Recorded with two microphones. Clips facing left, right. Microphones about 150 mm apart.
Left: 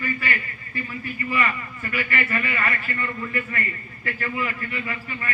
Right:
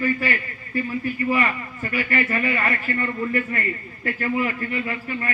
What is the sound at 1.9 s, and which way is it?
A man's voice, 35° right (ahead or behind).